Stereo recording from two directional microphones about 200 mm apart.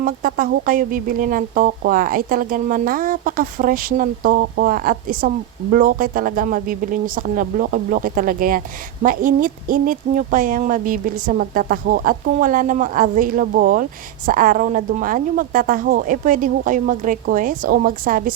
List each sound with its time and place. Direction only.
0.0 s speech: 45° right (ahead or behind)